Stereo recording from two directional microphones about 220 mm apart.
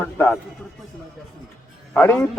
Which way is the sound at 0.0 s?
10° left (ahead or behind).